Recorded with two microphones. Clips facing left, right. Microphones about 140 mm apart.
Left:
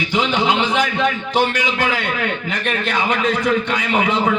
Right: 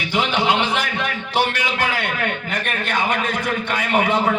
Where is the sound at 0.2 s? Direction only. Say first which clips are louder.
Left 1 dB; 45° left (ahead or behind).